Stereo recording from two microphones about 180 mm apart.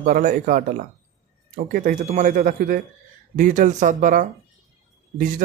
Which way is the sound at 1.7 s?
50° right (ahead or behind).